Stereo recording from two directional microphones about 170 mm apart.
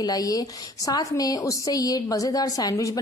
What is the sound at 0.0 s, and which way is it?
A woman's voice, 20° left (ahead or behind).